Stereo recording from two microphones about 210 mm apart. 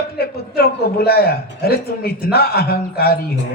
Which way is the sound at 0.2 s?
45° left (ahead or behind).